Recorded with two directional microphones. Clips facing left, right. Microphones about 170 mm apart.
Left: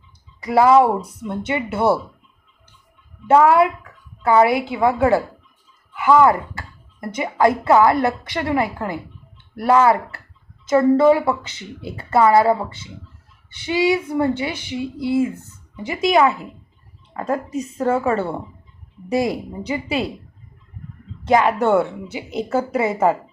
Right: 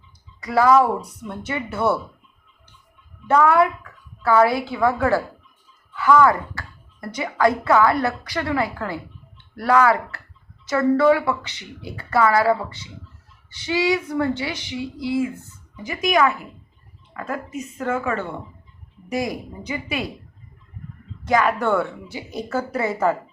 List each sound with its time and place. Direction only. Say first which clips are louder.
0.4 s a woman's voice: left 3 dB; 25° left (ahead or behind)
3.2 s a woman's voice: left 3 dB; 25° left (ahead or behind)
5.9 s a sound: left 2 dB; 20° left (ahead or behind)
7.2 s a woman's voice: left 2 dB; 25° left (ahead or behind)
21.2 s a woman's voice: left 3 dB; 25° left (ahead or behind)